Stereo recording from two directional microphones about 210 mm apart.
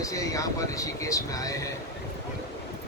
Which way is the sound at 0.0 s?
15° left (ahead or behind).